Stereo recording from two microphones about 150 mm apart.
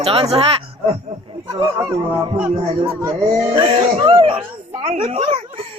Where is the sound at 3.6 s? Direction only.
35° right (ahead or behind).